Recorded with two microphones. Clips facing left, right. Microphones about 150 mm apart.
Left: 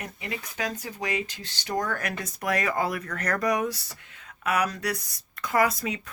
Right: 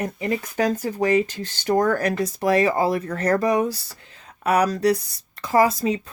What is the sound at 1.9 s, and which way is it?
Speech, 30° right (ahead or behind).